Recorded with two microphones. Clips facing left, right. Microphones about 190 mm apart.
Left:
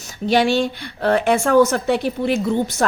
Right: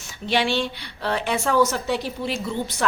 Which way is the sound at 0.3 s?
45° left (ahead or behind).